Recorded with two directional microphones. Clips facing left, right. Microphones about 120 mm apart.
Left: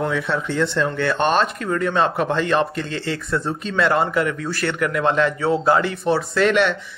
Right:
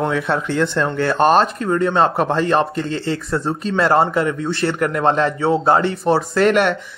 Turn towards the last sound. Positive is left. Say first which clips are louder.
# right 3 dB
turn(degrees=-45)  # may be behind; listen again after turning